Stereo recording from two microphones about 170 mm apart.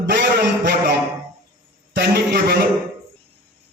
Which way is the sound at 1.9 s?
70° right (ahead or behind).